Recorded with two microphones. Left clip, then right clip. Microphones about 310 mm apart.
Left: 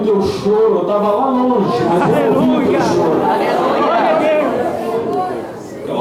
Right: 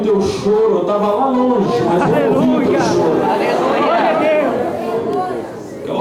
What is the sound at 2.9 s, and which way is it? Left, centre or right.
Speech, centre.